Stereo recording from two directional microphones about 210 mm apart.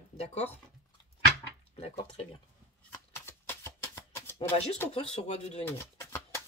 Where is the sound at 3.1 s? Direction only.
10° left (ahead or behind).